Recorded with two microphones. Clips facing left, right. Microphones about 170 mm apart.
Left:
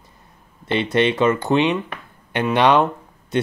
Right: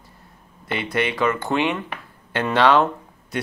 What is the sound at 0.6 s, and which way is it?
Speech, 25° left (ahead or behind).